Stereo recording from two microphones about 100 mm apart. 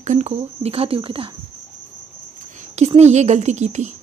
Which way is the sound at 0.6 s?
80° right.